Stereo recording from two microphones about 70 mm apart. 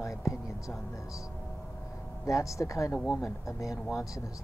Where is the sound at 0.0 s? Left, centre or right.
Left.